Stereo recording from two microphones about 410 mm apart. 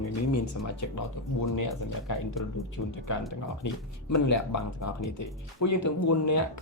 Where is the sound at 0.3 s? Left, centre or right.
Left.